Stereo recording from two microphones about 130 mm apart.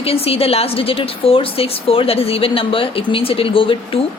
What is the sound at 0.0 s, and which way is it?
A woman's voice, 50° left (ahead or behind).